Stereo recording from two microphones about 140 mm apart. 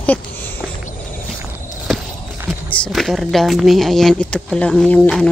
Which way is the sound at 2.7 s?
5° left (ahead or behind).